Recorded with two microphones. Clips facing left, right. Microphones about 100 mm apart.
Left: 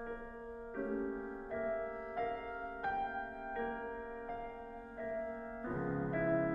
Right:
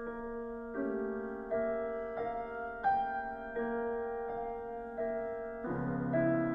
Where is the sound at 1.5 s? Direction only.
15° right (ahead or behind).